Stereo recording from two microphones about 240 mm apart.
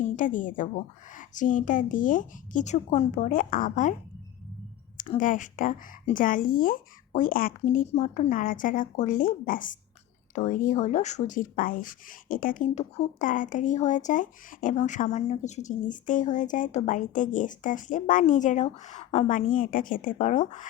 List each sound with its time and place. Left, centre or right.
0.0 s a woman's voice: left
5.1 s speech: left